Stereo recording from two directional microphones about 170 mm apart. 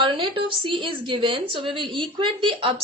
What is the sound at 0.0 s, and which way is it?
A woman's voice, 30° right (ahead or behind).